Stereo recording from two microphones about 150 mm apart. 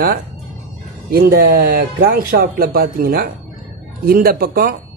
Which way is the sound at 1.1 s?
85° right.